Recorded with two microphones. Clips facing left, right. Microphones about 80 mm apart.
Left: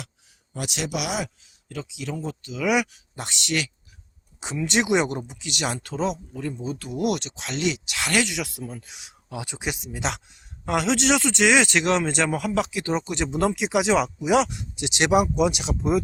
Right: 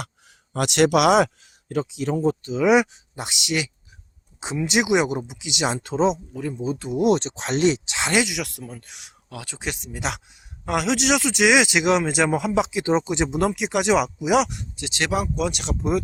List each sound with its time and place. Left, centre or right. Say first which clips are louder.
0.0 s a man's voice: right 6 dB; right
1.6 s speech: right 8 dB; right; by 6.7 s centre
6.7 s speech: right 6 dB; right
8.3 s speech: even; centre
9.3 s speech: left 1 dB; centre
13.4 s speech: left 3 dB; centre
14.8 s speech: left 4 dB; left
15.7 s speech: even; centre